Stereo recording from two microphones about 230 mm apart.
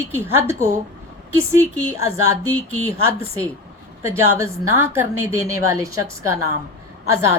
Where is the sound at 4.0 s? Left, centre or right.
Centre.